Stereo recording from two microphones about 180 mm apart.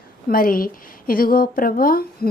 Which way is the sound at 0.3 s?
50° left (ahead or behind).